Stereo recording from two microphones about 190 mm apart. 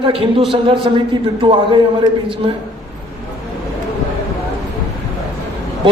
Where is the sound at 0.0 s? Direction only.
30° right (ahead or behind).